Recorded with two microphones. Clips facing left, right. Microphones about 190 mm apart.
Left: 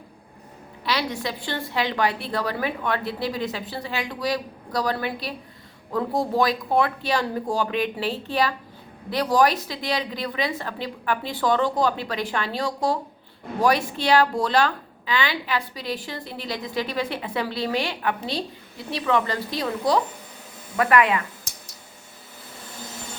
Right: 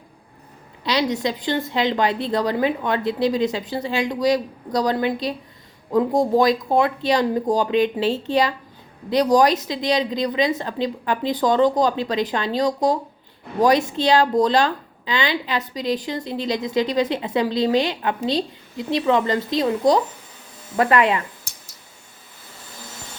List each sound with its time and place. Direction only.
0.9 s a woman's voice: 20° right (ahead or behind)